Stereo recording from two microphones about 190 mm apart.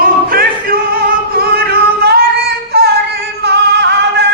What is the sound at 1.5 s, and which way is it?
Music, 60° right (ahead or behind).